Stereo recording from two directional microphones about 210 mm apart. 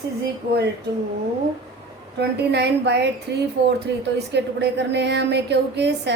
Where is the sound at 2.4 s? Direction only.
55° right (ahead or behind).